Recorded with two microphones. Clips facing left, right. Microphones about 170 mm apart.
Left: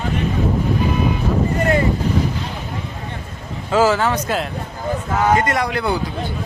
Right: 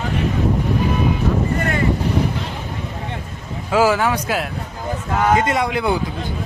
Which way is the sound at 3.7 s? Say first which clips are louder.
Even; 10° right (ahead or behind).